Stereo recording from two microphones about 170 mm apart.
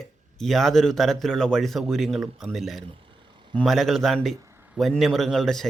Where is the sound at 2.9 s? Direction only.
30° right (ahead or behind).